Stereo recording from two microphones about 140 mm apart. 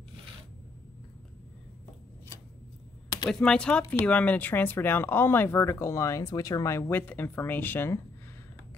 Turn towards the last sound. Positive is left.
turn(degrees=15)  # may be behind; listen again after turning